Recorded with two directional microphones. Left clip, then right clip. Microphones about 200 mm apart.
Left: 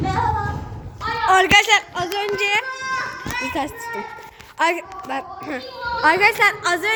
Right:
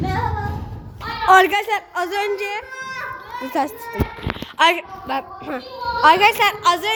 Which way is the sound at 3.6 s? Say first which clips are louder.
Right 7 dB; 15° right (ahead or behind).